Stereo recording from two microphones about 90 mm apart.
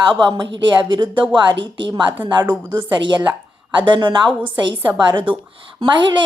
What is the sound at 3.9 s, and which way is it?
A woman's voice, 60° right (ahead or behind).